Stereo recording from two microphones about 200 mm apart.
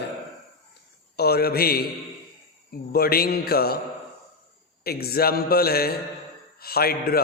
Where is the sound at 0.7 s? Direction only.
55° left (ahead or behind).